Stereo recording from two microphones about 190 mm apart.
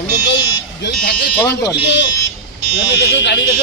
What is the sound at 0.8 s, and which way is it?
Speech, 60° left (ahead or behind).